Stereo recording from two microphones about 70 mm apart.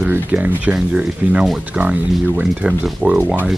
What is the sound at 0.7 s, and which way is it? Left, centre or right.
Speech, centre.